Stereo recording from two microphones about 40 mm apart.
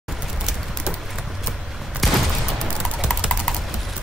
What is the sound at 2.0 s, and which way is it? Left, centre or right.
Fusillade, centre.